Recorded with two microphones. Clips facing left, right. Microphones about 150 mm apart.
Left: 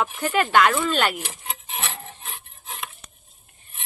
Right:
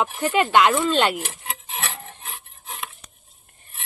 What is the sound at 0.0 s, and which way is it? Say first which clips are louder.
Speech: right 2 dB; 15° right (ahead or behind).